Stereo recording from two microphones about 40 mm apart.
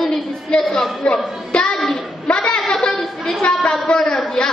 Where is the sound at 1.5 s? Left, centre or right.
Left.